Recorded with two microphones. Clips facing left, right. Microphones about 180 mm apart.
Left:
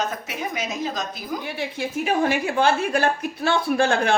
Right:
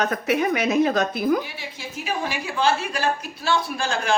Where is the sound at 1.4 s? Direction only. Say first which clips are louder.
Left 8 dB; 55° left (ahead or behind).